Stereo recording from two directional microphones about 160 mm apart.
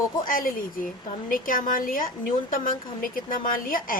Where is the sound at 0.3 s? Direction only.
60° left (ahead or behind).